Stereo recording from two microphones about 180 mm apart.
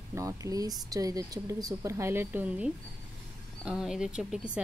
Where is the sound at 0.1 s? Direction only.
20° right (ahead or behind).